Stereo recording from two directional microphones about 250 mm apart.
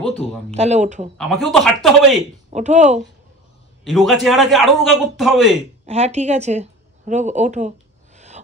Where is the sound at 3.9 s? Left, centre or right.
Centre.